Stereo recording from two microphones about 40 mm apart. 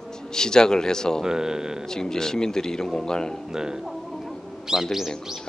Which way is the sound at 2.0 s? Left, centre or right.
Centre.